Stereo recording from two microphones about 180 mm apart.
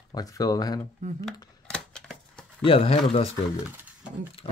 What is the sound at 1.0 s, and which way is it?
Speech, 45° right (ahead or behind).